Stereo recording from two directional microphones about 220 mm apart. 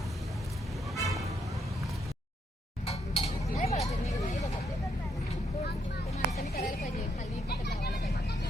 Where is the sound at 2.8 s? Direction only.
25° left (ahead or behind).